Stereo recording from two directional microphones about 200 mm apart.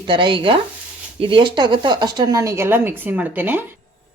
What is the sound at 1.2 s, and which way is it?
Speech, 25° right (ahead or behind).